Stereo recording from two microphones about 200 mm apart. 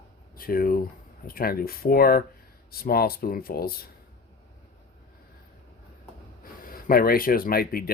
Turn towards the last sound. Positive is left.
turn(degrees=50)  # may be behind; listen again after turning